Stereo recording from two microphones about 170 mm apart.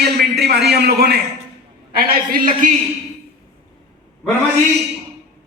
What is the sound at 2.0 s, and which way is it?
Speech, 55° right (ahead or behind).